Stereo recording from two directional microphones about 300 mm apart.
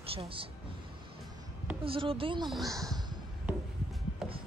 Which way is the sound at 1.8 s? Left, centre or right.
Centre.